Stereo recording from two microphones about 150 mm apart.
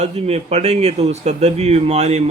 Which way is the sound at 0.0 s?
45° right (ahead or behind).